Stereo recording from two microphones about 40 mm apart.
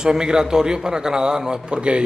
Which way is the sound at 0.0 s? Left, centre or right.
Centre.